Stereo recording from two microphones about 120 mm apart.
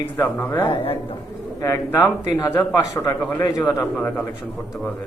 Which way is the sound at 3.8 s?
5° left (ahead or behind).